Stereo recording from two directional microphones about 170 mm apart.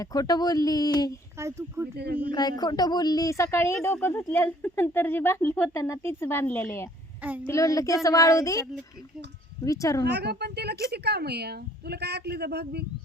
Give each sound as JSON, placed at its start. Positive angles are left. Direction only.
{"t": 0.0, "sound": "speech", "side_deg": 20}
{"t": 1.4, "sound": "speech", "side_deg": -15}
{"t": 2.0, "sound": "a woman's voice", "side_deg": -65}
{"t": 2.3, "sound": "a woman's voice", "side_deg": 25}
{"t": 7.2, "sound": "a woman's voice", "side_deg": -10}
{"t": 7.4, "sound": "speech", "side_deg": 20}
{"t": 9.6, "sound": "speech", "side_deg": 20}
{"t": 10.0, "sound": "a woman's voice", "side_deg": -75}